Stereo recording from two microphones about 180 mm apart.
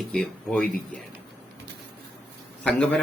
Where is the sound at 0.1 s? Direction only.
5° left (ahead or behind).